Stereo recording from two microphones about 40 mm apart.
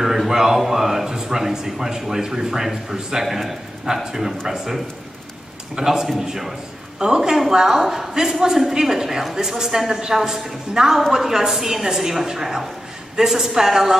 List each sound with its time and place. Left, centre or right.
0.0 s a man's voice: centre